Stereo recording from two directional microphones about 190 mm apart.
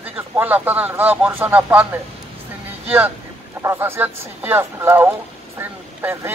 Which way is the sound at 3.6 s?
10° right (ahead or behind).